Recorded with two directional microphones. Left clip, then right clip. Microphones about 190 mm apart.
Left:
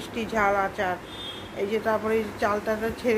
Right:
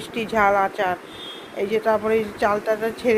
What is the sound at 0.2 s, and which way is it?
A woman's voice, 20° right (ahead or behind).